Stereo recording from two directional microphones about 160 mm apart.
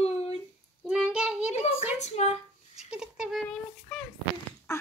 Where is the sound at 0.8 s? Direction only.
5° right (ahead or behind).